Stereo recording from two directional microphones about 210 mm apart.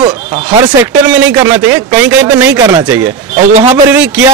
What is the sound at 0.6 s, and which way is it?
Speech, 5° right (ahead or behind).